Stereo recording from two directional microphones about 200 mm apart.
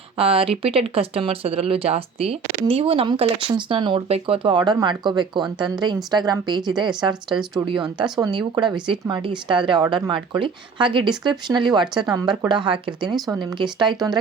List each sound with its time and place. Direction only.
0.2 s speech: 30° right (ahead or behind)